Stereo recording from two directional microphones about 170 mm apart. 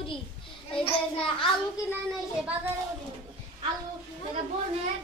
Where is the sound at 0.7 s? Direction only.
30° left (ahead or behind).